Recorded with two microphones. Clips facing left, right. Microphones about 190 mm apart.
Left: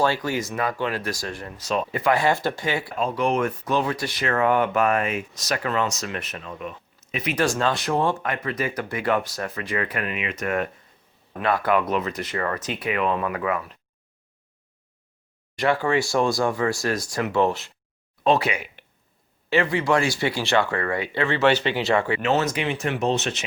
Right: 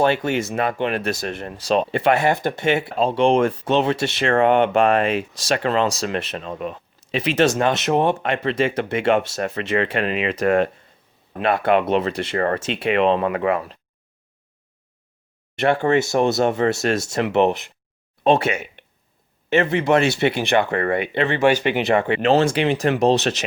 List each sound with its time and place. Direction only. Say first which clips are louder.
0.0 s speech: right 4 dB; 25° right (ahead or behind)
15.7 s speech: right 4 dB; 25° right (ahead or behind)
22.2 s speech: right 6 dB; 30° right (ahead or behind)